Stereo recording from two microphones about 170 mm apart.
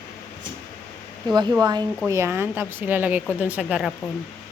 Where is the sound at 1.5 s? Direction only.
25° right (ahead or behind); by 3.9 s 5° right (ahead or behind).